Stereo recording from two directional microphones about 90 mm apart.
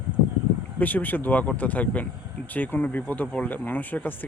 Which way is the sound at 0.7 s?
20° left (ahead or behind).